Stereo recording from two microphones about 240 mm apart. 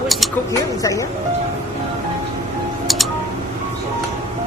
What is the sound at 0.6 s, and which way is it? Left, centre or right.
Speech, centre.